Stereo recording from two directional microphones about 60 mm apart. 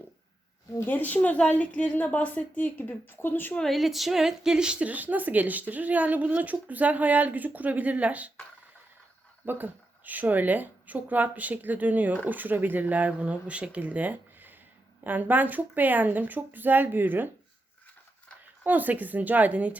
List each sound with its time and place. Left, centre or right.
0.9 s a woman's voice: left
3.6 s a woman's voice: centre; by 8.3 s right
9.5 s a woman's voice: right
18.6 s a woman's voice: right